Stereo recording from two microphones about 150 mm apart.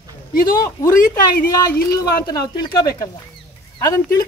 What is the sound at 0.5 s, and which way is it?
Speech, 25° left (ahead or behind).